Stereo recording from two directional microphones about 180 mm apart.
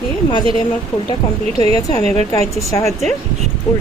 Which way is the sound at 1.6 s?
20° left (ahead or behind).